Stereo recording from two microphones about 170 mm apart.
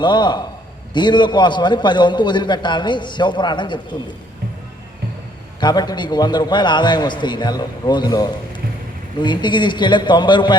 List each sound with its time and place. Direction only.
0.0 s a man's voice: 25° left (ahead or behind)
5.5 s a man's voice: 25° left (ahead or behind)